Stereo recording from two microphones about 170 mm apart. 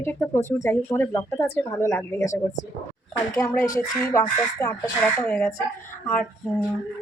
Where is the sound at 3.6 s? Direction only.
20° left (ahead or behind).